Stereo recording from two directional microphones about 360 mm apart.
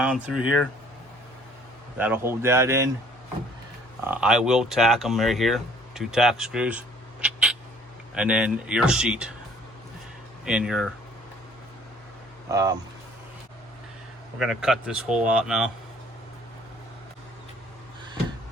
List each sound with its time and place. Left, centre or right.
0.0 s speech: centre
2.0 s speech: centre
4.0 s speech: centre
10.4 s speech: centre
12.5 s speech: centre
14.3 s speech: centre